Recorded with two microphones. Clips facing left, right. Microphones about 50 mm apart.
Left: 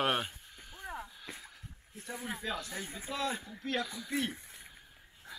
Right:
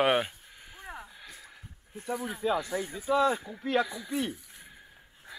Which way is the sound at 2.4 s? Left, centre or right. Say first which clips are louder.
Right 13 dB; centre.